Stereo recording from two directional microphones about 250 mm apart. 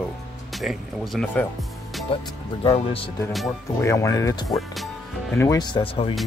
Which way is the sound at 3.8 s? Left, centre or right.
Centre.